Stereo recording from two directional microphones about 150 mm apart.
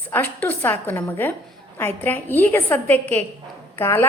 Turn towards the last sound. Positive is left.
turn(degrees=15)  # may be behind; listen again after turning